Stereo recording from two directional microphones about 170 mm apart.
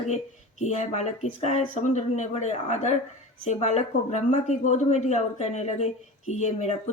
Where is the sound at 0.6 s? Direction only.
40° left (ahead or behind).